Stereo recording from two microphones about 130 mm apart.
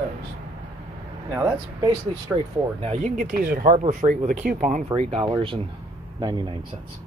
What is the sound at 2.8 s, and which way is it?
Speech, 60° right (ahead or behind).